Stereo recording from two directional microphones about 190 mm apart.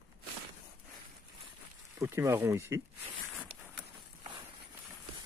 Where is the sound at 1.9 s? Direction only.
15° right (ahead or behind).